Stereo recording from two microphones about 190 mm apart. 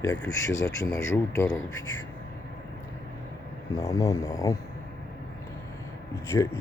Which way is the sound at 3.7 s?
15° left (ahead or behind).